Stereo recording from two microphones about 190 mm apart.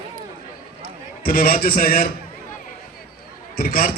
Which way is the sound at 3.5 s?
50° left (ahead or behind).